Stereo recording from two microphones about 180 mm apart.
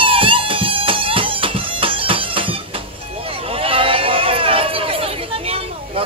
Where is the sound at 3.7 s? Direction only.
30° right (ahead or behind).